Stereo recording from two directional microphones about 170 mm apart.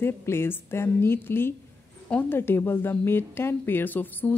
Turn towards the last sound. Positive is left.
turn(degrees=10)  # may be behind; listen again after turning